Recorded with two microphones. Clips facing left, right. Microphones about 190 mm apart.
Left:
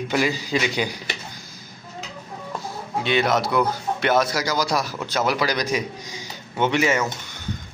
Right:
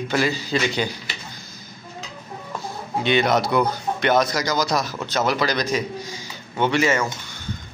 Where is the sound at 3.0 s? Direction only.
Centre (ahead or behind).